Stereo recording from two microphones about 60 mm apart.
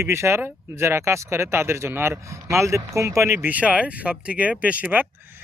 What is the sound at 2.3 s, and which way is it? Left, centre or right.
Speech, right.